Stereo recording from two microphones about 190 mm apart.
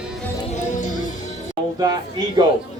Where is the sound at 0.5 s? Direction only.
40° left (ahead or behind).